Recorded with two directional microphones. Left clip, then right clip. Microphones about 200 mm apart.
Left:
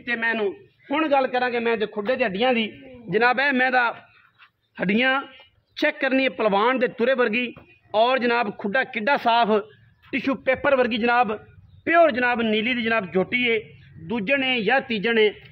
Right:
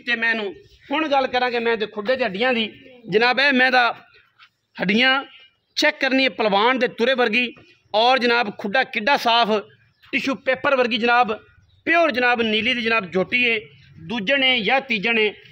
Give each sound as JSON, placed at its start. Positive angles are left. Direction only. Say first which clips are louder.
{"t": 0.0, "sound": "a man's voice", "louder": "right 2 dB", "side_deg": -35}
{"t": 3.1, "sound": "a man's voice", "louder": "right 3 dB", "side_deg": -50}
{"t": 4.7, "sound": "a man's voice", "louder": "right 3 dB", "side_deg": -45}
{"t": 10.1, "sound": "a man's voice", "louder": "right 1 dB", "side_deg": -30}